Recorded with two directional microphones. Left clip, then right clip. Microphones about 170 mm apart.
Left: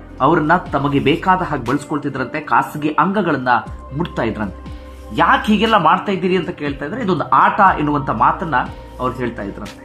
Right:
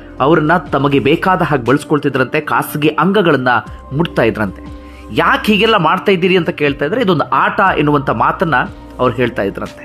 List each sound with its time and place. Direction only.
0.2 s speech: 30° right (ahead or behind)